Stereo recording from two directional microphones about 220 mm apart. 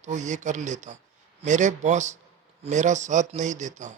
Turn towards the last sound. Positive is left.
turn(degrees=-35)  # may be behind; listen again after turning